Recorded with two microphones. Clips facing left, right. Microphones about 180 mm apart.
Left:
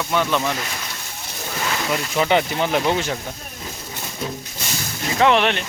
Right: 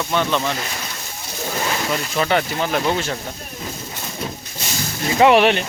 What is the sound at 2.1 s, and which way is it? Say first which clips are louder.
Speech: left 2 dB; 15° left (ahead or behind).